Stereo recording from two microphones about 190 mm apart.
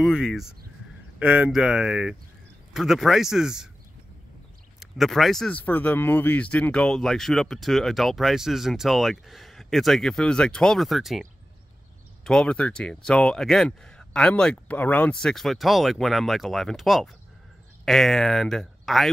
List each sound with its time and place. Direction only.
0.0 s speech: centre (ahead or behind)
4.7 s speech: centre (ahead or behind)
12.3 s speech: 5° left (ahead or behind)